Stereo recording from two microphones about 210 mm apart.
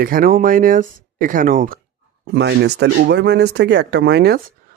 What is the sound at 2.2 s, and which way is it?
Speech, 50° right (ahead or behind).